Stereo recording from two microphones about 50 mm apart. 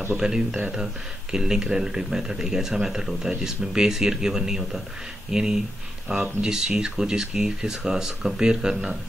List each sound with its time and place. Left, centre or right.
0.2 s speech: centre